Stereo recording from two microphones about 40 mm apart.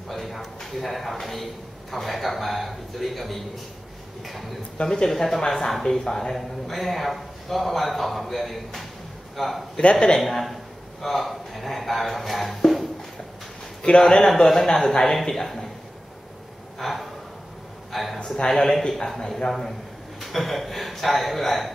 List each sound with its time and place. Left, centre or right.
0.1 s a sound: centre
1.2 s speech: centre
4.7 s speech: centre
9.8 s speech: left
10.1 s speech: centre
13.8 s speech: centre
16.7 s gasp: centre
17.9 s speech: centre
18.2 s speech: centre